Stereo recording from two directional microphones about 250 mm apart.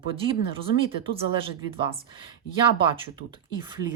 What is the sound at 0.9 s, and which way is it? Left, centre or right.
Speech, right.